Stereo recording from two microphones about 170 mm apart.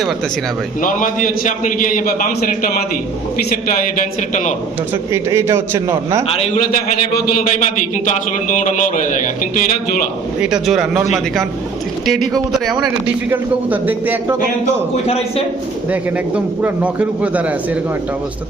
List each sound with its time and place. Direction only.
0.8 s a man's voice: 55° left (ahead or behind)
5.1 s speech: 15° right (ahead or behind)
6.2 s a man's voice: 35° left (ahead or behind)
7.6 s a man's voice: 45° left (ahead or behind)
10.4 s speech: 5° right (ahead or behind)
12.0 s speech: centre (ahead or behind)
15.0 s a man's voice: 35° left (ahead or behind)
15.9 s speech: 10° right (ahead or behind)